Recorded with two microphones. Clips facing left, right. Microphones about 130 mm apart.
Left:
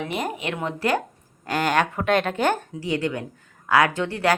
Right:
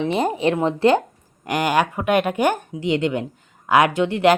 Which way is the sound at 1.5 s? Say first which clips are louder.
Right 2 dB; 15° right (ahead or behind).